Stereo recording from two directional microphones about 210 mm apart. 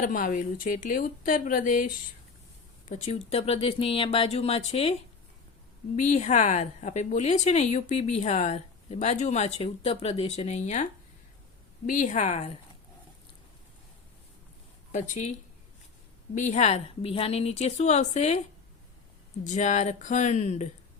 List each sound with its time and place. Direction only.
0.0 s a woman's voice: 40° left (ahead or behind)
6.0 s a woman's voice: 35° left (ahead or behind)
11.9 s a woman's voice: 35° left (ahead or behind)
16.3 s a woman's voice: 35° left (ahead or behind)
19.5 s a woman's voice: 35° left (ahead or behind)